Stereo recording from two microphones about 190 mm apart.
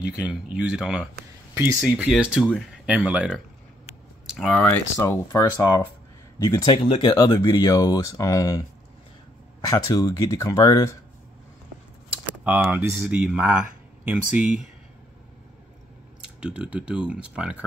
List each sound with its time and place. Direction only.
0.0 s speech: 5° right (ahead or behind)
4.3 s a sound: centre (ahead or behind)
4.6 s speech: 15° left (ahead or behind)
9.7 s speech: 20° left (ahead or behind)
12.4 s speech: 10° right (ahead or behind)
16.3 s speech: 5° right (ahead or behind)